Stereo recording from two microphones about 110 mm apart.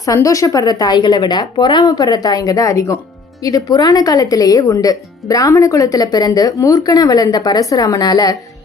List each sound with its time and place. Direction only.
0.0 s speech: 30° left (ahead or behind)